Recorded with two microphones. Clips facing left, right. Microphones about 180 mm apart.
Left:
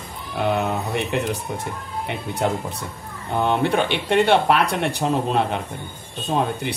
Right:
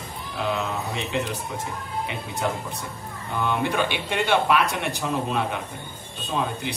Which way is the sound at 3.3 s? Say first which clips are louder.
Left 5 dB; 55° left (ahead or behind).